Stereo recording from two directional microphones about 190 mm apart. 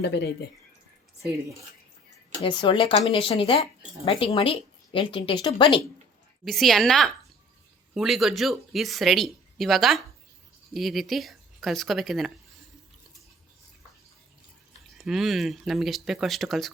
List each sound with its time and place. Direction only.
0.0 s speech: 65° left (ahead or behind)
2.4 s a woman's voice: 25° left (ahead or behind)
6.4 s speech: centre (ahead or behind)
14.8 s speech: centre (ahead or behind)